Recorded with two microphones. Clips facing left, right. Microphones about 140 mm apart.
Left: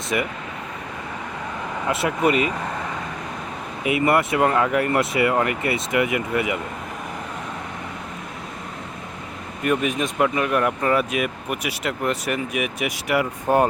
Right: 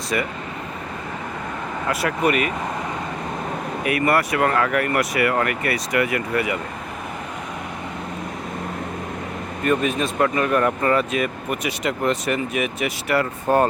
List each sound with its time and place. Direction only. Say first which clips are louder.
1.9 s speech: left 1 dB; 25° left (ahead or behind)
3.8 s speech: left 1 dB; 20° left (ahead or behind)
9.6 s speech: right 1 dB; 15° left (ahead or behind)